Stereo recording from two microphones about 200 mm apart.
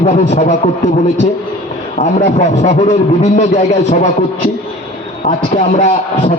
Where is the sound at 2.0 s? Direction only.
35° left (ahead or behind).